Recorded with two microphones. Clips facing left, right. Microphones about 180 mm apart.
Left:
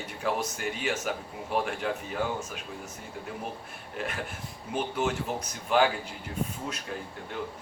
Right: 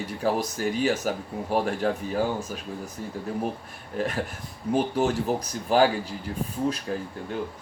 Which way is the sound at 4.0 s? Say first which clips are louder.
Right 6 dB; 40° right (ahead or behind).